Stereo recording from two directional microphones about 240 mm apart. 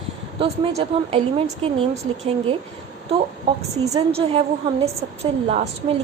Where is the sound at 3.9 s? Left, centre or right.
Right.